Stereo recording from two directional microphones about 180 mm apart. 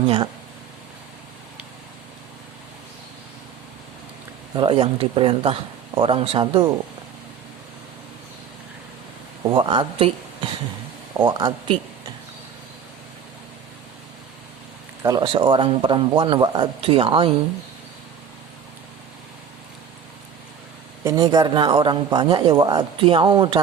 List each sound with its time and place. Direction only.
4.5 s speech: 30° right (ahead or behind)
9.5 s speech: 25° right (ahead or behind)
15.0 s speech: 25° right (ahead or behind)
21.0 s speech: 20° right (ahead or behind)